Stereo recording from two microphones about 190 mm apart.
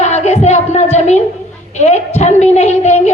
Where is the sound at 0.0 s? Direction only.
35° left (ahead or behind).